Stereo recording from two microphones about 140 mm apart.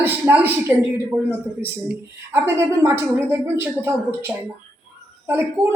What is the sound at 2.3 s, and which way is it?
A man's voice, 15° right (ahead or behind).